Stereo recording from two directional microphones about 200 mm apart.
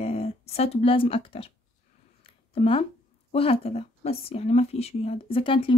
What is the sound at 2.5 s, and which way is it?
Speech, 30° left (ahead or behind).